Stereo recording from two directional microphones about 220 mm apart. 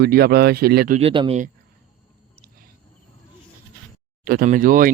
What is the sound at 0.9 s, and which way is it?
Speech, 25° right (ahead or behind).